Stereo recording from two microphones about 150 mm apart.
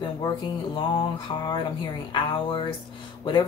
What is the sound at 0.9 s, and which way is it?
Speech, 30° left (ahead or behind).